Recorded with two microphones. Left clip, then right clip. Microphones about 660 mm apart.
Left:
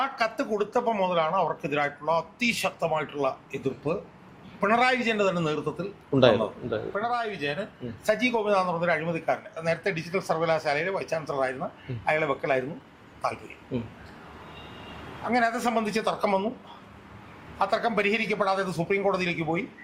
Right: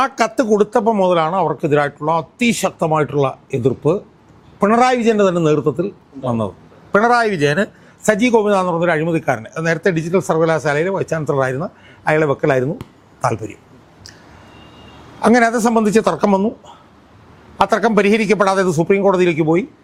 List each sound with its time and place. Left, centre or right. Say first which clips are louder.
0.0 s speech: right 11 dB; right
6.9 s speech: right 19 dB; right
8.0 s a man's voice: right 11 dB; right
15.3 s speech: right 11 dB; right
17.6 s speech: right 11 dB; right